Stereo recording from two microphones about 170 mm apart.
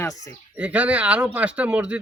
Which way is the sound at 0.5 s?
10° right (ahead or behind).